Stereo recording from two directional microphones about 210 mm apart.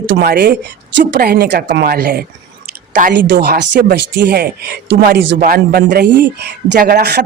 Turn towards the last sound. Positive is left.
turn(degrees=-50)  # may be behind; listen again after turning